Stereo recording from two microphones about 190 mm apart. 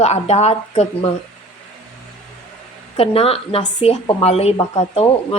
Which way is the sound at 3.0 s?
30° left (ahead or behind).